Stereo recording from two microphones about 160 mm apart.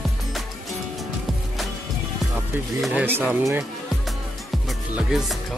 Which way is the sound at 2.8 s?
10° right (ahead or behind).